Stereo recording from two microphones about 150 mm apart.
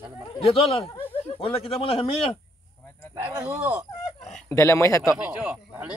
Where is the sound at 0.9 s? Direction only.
15° left (ahead or behind).